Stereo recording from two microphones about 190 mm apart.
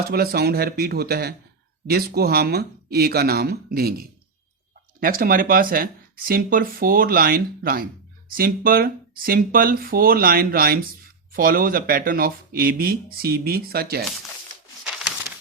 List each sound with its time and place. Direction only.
0.1 s speech: 55° right (ahead or behind)